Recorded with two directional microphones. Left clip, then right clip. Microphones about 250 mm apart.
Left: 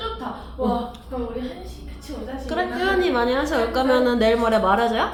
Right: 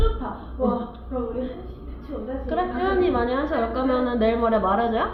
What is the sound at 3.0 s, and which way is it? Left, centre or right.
A woman's voice, left.